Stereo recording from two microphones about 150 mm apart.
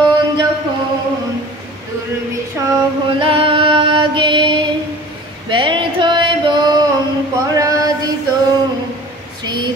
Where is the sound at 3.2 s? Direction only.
35° right (ahead or behind).